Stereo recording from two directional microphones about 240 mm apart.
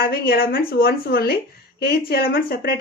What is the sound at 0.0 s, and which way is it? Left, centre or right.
Speech, left.